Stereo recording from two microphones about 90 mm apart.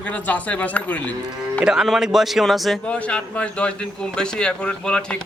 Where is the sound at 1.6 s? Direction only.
5° right (ahead or behind).